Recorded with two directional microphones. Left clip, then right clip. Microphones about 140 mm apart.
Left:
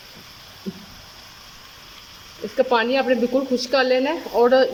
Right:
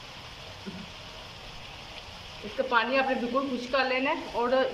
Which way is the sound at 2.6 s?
85° left.